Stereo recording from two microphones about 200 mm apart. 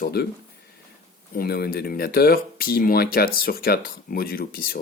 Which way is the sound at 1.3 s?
50° left (ahead or behind).